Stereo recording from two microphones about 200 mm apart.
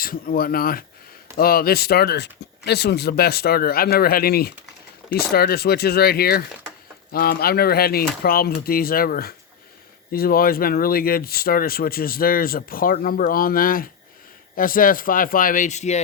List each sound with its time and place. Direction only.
0.0 s speech: 45° left (ahead or behind)